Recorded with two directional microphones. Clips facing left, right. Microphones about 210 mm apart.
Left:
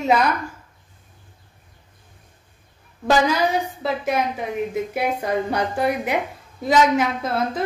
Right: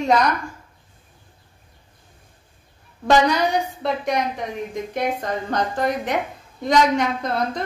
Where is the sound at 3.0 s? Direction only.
Centre (ahead or behind).